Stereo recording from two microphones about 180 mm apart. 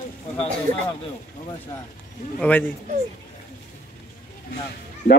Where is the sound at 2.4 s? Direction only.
10° left (ahead or behind).